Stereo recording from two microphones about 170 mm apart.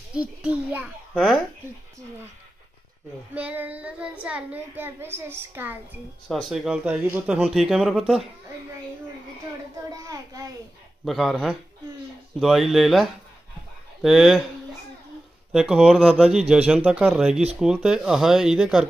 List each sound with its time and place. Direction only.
0.1 s a woman's voice: 5° right (ahead or behind)
3.3 s a woman's voice: 10° right (ahead or behind)
6.2 s speech: centre (ahead or behind)
10.0 s a child's voice: 20° right (ahead or behind)
11.1 s speech: centre (ahead or behind)
15.5 s speech: 5° right (ahead or behind)